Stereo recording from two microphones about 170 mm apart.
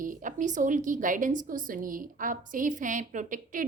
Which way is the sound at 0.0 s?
50° right (ahead or behind).